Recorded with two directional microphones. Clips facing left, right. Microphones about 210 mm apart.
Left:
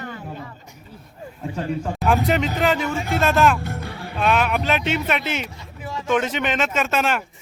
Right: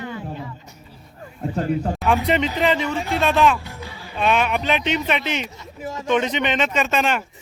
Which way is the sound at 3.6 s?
55° left (ahead or behind).